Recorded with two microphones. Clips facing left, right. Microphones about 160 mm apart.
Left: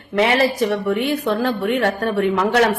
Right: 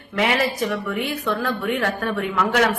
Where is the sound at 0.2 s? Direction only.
30° left (ahead or behind).